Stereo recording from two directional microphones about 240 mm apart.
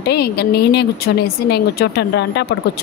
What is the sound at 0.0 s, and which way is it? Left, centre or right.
A woman's voice, left.